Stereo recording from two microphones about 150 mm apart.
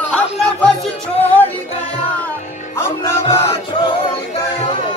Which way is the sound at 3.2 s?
40° left (ahead or behind).